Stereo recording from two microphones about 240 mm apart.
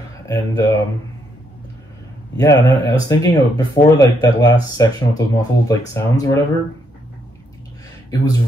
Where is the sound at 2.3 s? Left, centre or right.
Centre.